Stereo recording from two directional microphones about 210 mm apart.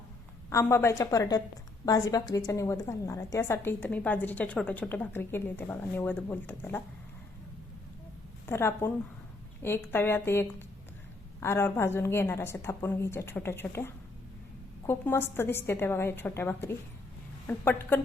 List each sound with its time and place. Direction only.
0.5 s a woman's voice: 10° left (ahead or behind)
8.4 s a woman's voice: 10° left (ahead or behind)